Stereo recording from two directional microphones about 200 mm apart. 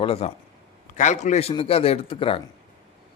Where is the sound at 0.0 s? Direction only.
30° left (ahead or behind).